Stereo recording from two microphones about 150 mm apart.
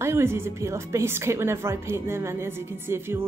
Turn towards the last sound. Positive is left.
turn(degrees=-15)  # may be behind; listen again after turning